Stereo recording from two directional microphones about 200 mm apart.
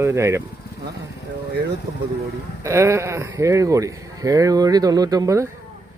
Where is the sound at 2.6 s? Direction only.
15° right (ahead or behind).